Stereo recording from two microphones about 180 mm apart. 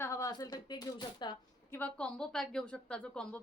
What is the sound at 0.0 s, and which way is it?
Speech, 15° left (ahead or behind).